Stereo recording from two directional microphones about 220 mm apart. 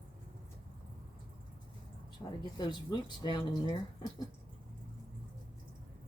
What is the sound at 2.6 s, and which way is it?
Speech, 20° left (ahead or behind).